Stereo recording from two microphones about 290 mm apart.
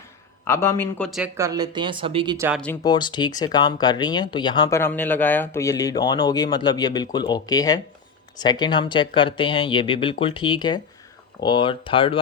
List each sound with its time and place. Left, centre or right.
0.4 s speech: centre
2.6 s speech: centre